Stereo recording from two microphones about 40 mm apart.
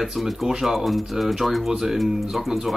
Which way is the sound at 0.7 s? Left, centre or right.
Centre.